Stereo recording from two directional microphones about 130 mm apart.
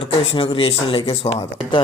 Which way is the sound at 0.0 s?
45° left (ahead or behind).